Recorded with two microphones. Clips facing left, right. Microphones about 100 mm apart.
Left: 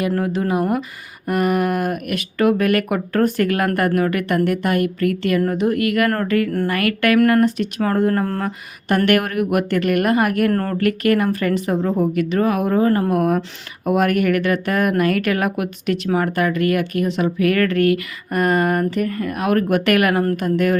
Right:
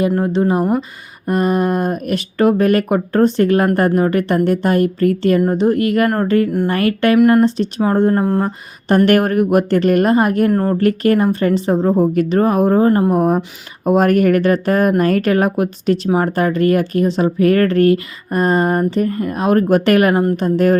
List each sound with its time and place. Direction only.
0.2 s speech: 30° right (ahead or behind)
9.0 s speech: 35° right (ahead or behind)
10.5 s speech: 15° right (ahead or behind)
10.8 s speech: 30° right (ahead or behind)